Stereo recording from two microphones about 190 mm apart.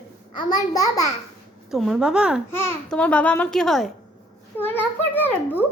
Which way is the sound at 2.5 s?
10° left (ahead or behind).